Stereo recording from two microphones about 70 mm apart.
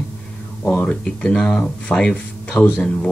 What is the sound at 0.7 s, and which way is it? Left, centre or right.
Speech, centre.